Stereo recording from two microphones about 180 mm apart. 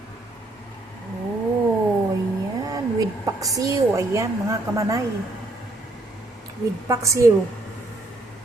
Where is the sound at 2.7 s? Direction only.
20° right (ahead or behind).